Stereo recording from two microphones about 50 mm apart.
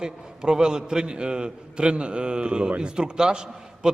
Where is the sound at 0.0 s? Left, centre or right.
Centre.